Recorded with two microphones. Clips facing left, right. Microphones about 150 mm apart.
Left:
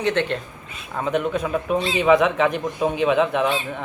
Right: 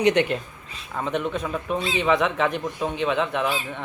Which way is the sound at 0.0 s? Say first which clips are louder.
Right 2 dB; 15° right (ahead or behind).